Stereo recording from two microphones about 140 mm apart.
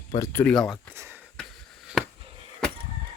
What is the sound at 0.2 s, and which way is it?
Speech, 15° left (ahead or behind).